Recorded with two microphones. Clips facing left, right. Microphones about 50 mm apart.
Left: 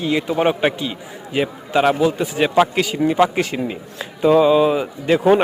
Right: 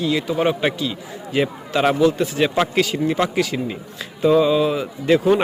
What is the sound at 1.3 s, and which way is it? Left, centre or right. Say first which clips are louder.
A man's voice: left 1 dB; centre.